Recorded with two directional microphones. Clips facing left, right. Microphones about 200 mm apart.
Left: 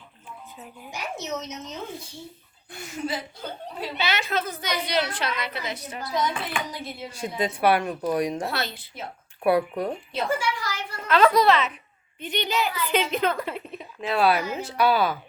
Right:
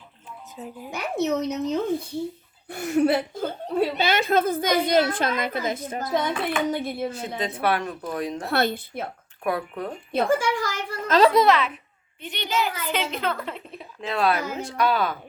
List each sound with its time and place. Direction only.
0.5 s a woman's voice: 30° right (ahead or behind)
0.9 s speech: 60° right (ahead or behind)
3.3 s a woman's voice: 50° right (ahead or behind)
7.1 s speech: 10° left (ahead or behind)
8.4 s speech: 55° right (ahead or behind)
9.4 s speech: 10° left (ahead or behind)
10.1 s a woman's voice: 50° right (ahead or behind)
11.2 s a woman's voice: 30° right (ahead or behind)
12.2 s a child's voice: 20° left (ahead or behind)